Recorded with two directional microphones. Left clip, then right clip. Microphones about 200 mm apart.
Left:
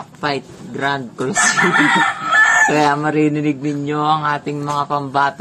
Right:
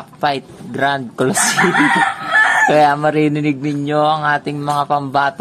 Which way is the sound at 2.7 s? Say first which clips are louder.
Right 3 dB; 35° right (ahead or behind).